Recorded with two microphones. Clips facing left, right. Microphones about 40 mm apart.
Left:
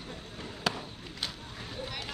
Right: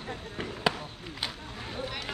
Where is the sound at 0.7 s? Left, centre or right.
Centre.